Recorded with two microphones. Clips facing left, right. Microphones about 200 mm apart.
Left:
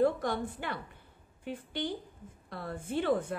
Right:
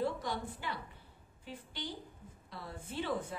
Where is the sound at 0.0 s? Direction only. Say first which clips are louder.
Left 8 dB; 55° left (ahead or behind).